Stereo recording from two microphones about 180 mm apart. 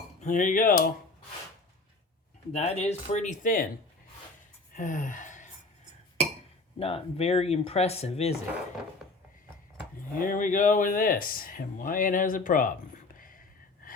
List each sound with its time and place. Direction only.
0.2 s speech: 45° left (ahead or behind)
2.5 s speech: 40° left (ahead or behind)
4.7 s gasp: 45° left (ahead or behind)
6.7 s speech: 30° left (ahead or behind)
10.2 s speech: 45° left (ahead or behind)
13.1 s a sound: 50° left (ahead or behind)